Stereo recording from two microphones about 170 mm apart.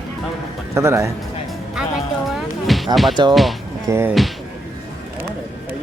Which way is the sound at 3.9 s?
15° right (ahead or behind).